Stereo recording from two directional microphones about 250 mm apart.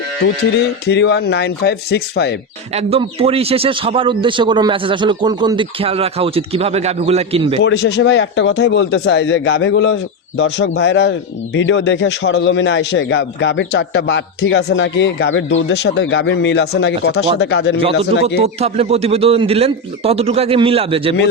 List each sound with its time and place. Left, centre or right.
0.6 s speech: left
2.7 s speech: right
7.6 s a man's voice: left
18.4 s speech: right